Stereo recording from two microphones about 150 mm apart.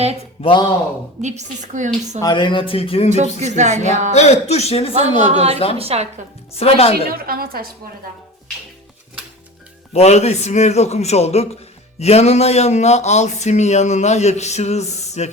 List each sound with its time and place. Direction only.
0.4 s speech: 45° left (ahead or behind)
1.2 s a woman's voice: 50° right (ahead or behind)
2.2 s speech: 30° left (ahead or behind)
3.1 s a woman's voice: 50° right (ahead or behind)
4.1 s speech: 45° left (ahead or behind)
4.9 s a woman's voice: 45° right (ahead or behind)
6.5 s speech: 40° left (ahead or behind)
7.1 s a woman's voice: 80° right
9.9 s speech: 45° left (ahead or behind)